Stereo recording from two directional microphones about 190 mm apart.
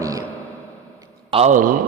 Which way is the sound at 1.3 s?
35° right (ahead or behind).